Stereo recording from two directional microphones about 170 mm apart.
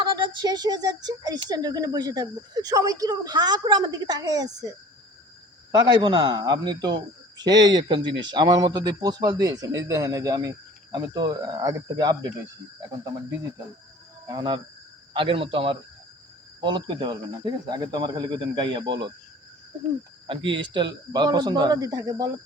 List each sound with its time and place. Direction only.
0.0 s a woman's voice: 25° right (ahead or behind)
5.7 s a woman's voice: 25° right (ahead or behind)
14.3 s a woman's voice: 25° right (ahead or behind)
20.2 s a man's voice: 30° right (ahead or behind)